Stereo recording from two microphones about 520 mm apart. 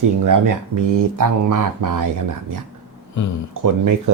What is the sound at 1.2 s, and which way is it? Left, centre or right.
Speech, right.